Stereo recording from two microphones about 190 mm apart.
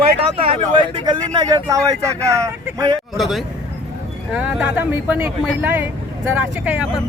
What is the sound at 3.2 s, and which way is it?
Speech, centre (ahead or behind).